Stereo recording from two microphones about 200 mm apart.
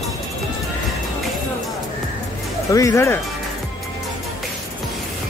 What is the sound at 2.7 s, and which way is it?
Speech, 15° left (ahead or behind).